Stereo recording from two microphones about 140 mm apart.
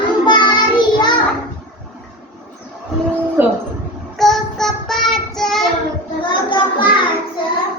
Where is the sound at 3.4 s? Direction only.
15° right (ahead or behind).